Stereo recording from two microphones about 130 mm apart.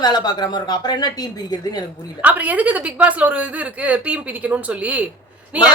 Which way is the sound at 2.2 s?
10° right (ahead or behind).